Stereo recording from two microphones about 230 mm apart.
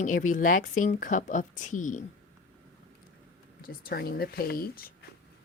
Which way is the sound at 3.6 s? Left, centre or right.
Left.